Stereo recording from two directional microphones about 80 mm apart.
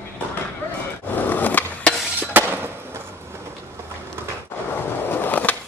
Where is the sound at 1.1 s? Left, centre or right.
Left.